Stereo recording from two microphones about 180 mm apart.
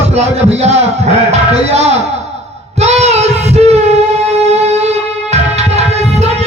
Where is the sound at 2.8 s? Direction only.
35° right (ahead or behind).